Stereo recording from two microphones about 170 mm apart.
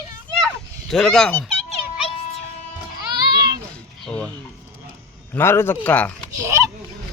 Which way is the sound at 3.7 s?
5° left (ahead or behind).